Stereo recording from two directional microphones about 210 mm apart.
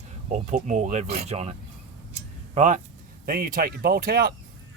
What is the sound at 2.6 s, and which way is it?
Speech, 35° right (ahead or behind).